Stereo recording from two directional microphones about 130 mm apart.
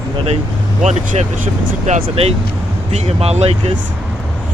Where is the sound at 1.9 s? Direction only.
50° right (ahead or behind).